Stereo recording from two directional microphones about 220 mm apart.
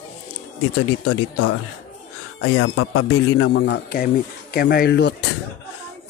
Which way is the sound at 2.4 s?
70° left (ahead or behind).